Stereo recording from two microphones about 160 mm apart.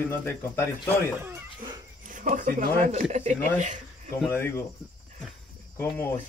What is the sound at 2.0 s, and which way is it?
Speech, 55° right (ahead or behind).